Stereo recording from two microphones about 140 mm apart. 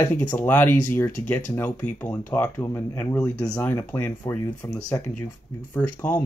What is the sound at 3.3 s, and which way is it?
Speech, 25° left (ahead or behind).